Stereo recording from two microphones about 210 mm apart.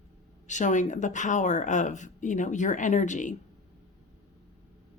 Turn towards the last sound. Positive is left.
turn(degrees=35)  # may be behind; listen again after turning